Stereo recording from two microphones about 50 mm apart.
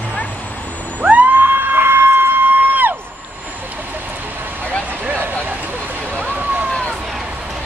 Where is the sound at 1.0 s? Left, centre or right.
Right.